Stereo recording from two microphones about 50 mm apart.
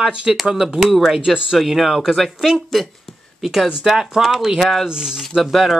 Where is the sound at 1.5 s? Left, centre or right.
Centre.